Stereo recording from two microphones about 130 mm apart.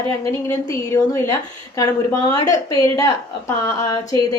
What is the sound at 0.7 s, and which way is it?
A woman's voice, 25° left (ahead or behind).